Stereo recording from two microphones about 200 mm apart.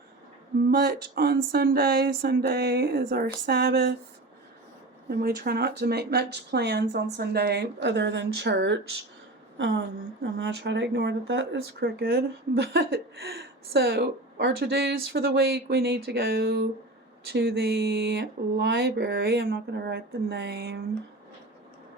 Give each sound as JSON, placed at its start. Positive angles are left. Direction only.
{"t": 0.7, "sound": "a sound", "side_deg": -55}
{"t": 3.4, "sound": "speech", "side_deg": -55}
{"t": 5.0, "sound": "a woman's voice", "side_deg": -50}